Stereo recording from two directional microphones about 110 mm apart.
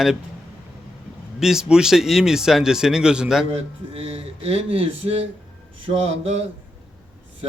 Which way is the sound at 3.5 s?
60° right (ahead or behind).